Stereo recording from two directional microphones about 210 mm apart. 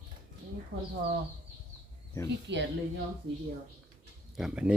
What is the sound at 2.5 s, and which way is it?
Speech, 55° right (ahead or behind).